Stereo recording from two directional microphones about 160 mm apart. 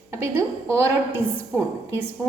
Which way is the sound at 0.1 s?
20° right (ahead or behind).